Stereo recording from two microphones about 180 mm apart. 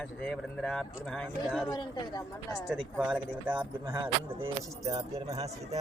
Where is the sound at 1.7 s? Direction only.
25° left (ahead or behind).